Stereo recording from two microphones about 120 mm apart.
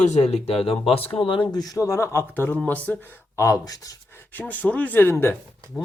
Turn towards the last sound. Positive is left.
turn(degrees=-5)  # may be behind; listen again after turning